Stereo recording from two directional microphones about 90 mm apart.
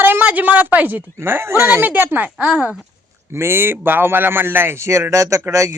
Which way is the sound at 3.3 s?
25° right (ahead or behind).